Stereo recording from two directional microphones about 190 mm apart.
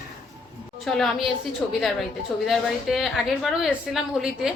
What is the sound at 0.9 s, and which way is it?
A woman's voice, centre (ahead or behind).